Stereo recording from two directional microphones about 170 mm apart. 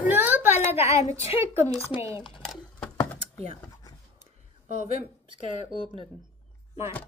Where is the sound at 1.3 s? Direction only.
15° right (ahead or behind).